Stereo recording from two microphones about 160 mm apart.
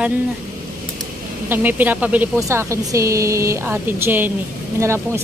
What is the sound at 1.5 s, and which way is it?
Speech, 10° right (ahead or behind).